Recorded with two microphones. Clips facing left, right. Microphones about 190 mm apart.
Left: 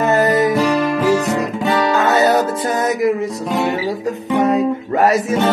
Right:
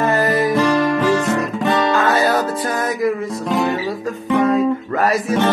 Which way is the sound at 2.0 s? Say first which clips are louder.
Left 2 dB; 20° left (ahead or behind).